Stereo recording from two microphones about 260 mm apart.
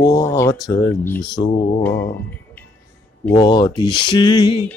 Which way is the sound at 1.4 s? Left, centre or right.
Centre.